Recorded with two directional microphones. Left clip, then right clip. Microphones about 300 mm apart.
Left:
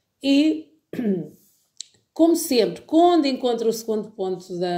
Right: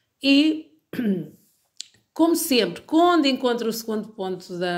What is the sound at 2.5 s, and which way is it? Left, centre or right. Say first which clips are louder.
Speech: left 1 dB; right.